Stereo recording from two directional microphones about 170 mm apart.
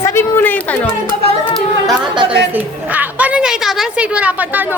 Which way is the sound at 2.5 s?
10° right (ahead or behind).